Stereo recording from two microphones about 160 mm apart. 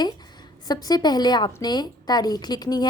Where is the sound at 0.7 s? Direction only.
25° left (ahead or behind).